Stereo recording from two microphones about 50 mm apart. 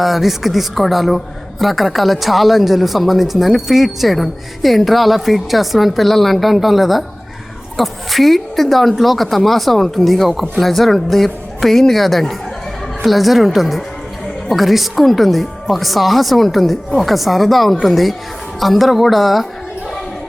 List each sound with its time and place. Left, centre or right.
0.0 s a woman's voice: centre